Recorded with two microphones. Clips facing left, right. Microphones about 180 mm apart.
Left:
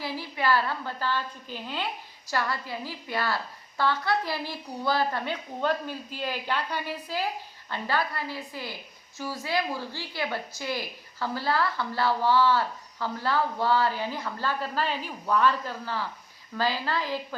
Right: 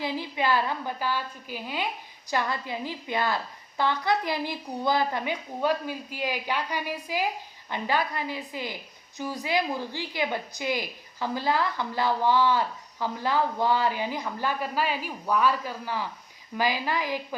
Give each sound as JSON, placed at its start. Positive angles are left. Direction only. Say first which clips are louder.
{"t": 0.0, "sound": "a woman's voice", "louder": "right 2 dB", "side_deg": -20}